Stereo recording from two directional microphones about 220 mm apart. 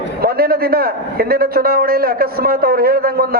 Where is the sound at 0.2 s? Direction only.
45° right (ahead or behind).